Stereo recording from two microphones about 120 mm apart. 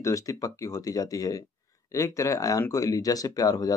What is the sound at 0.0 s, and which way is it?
Speech, 30° left (ahead or behind).